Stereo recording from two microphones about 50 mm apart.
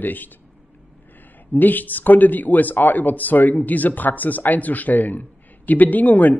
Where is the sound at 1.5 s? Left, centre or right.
Left.